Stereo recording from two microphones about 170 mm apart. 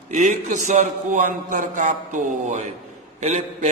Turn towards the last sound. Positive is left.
turn(degrees=-45)  # may be behind; listen again after turning